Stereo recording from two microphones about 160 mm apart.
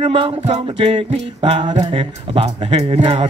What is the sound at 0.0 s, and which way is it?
Music, 35° right (ahead or behind).